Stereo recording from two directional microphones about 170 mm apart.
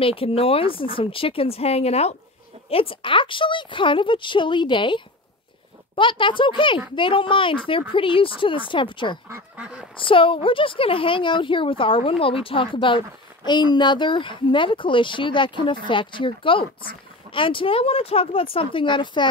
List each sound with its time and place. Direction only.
0.0 s a woman's voice: 35° left (ahead or behind)
9.3 s speech: 5° right (ahead or behind)
9.9 s a woman's voice: 30° left (ahead or behind)